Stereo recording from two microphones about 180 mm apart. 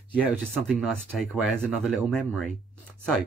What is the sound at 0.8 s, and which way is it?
Speech, centre (ahead or behind).